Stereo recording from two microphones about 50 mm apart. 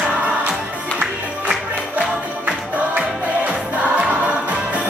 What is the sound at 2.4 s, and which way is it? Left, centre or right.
Music, right.